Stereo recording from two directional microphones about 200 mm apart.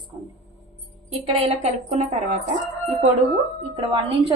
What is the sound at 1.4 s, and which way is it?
Speech, 35° right (ahead or behind).